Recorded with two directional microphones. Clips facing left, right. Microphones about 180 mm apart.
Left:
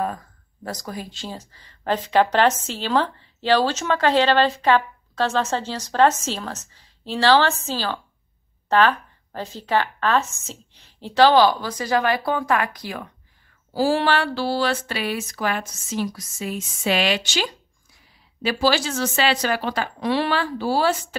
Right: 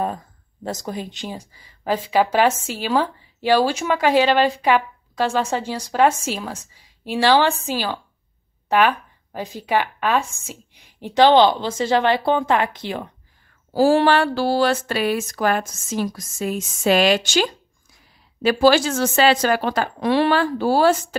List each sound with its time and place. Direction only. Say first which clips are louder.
0.7 s speech: right 4 dB; 25° right (ahead or behind)
13.7 s speech: right 5 dB; 50° right (ahead or behind)